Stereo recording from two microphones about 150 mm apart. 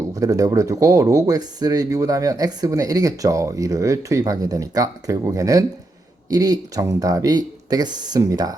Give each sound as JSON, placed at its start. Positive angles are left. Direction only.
{"t": 0.2, "sound": "speech", "side_deg": -20}